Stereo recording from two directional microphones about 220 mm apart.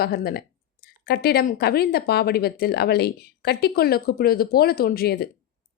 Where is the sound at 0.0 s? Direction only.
45° left (ahead or behind).